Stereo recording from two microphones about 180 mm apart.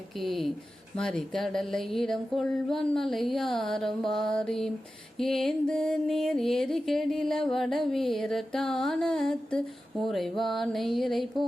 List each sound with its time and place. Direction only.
0.2 s music: centre (ahead or behind)